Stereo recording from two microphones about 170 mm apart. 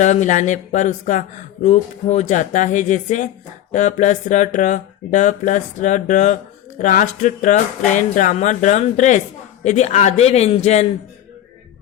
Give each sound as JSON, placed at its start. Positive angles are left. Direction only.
{"t": 0.0, "sound": "a man's voice", "side_deg": 45}